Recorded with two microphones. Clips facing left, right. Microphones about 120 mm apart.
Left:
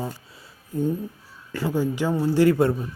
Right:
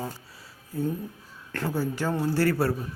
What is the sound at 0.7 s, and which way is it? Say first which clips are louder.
Speech: left 4 dB; 20° left (ahead or behind).